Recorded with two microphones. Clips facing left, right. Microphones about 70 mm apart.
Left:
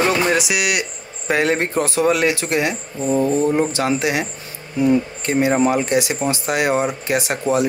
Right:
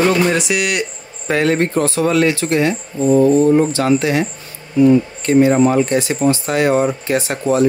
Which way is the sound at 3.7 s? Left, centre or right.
Centre.